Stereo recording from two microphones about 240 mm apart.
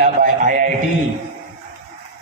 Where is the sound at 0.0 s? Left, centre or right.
Right.